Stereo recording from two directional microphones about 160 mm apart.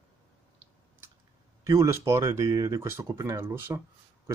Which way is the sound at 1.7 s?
20° right (ahead or behind).